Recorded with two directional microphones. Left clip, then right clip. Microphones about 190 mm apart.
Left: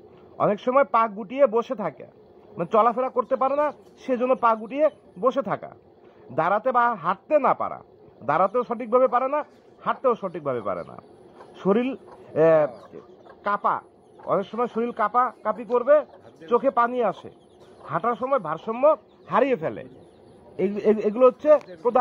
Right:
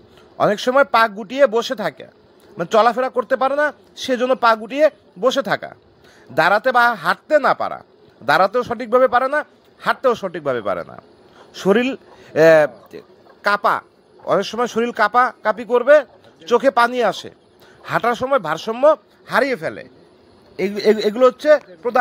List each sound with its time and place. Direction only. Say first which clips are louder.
0.4 s a man's voice: right 5 dB; 35° right (ahead or behind)
19.2 s speech: right 3 dB; 15° right (ahead or behind)